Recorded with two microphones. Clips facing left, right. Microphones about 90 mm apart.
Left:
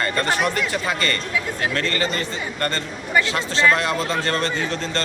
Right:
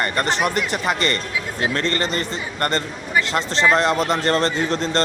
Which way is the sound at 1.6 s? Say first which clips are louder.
Right 3 dB; 30° right (ahead or behind).